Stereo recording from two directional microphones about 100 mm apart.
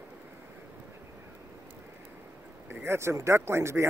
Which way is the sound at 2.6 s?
25° right (ahead or behind).